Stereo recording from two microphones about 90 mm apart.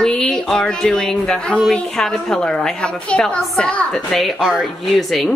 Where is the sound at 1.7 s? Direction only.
5° left (ahead or behind).